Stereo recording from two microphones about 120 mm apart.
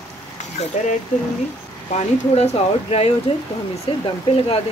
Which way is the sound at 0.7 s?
90° left.